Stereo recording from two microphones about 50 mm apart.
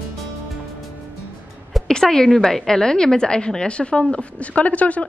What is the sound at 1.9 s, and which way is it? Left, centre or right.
A woman's voice, centre.